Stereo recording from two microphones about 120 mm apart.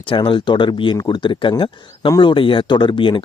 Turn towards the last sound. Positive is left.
turn(degrees=45)  # may be behind; listen again after turning